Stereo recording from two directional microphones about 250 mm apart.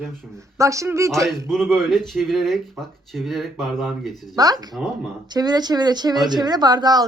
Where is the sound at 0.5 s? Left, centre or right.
Centre.